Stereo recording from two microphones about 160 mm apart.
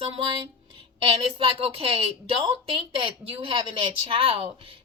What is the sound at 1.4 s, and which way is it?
Speech, 35° right (ahead or behind).